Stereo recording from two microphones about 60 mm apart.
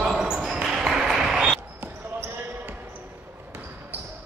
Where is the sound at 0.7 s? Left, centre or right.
Centre.